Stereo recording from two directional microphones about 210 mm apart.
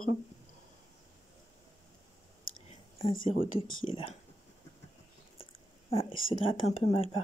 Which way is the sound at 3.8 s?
25° left (ahead or behind).